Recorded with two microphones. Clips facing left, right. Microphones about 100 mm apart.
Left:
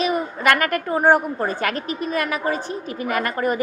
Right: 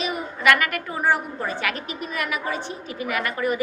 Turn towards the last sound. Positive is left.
turn(degrees=40)  # may be behind; listen again after turning